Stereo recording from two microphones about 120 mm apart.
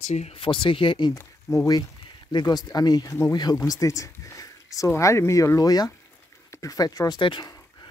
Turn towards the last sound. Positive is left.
turn(degrees=40)  # may be behind; listen again after turning